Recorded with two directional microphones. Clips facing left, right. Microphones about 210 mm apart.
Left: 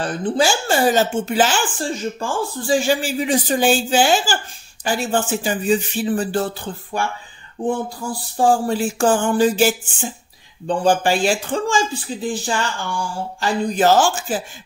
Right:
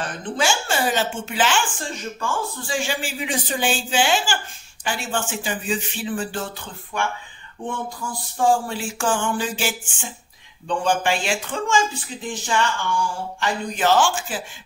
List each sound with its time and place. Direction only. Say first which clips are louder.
0.0 s speech: left 6 dB; 35° left (ahead or behind)